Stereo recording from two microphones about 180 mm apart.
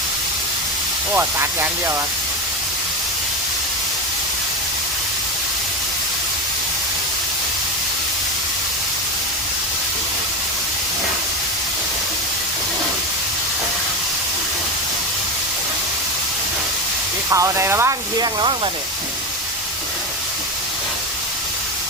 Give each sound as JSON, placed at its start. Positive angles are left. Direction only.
{"t": 1.1, "sound": "speech", "side_deg": -10}
{"t": 17.3, "sound": "speech", "side_deg": -15}